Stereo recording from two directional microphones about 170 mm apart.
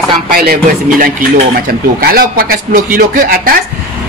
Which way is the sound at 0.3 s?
60° right (ahead or behind).